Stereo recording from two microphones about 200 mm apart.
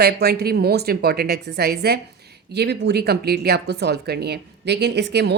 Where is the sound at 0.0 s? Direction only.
55° right (ahead or behind).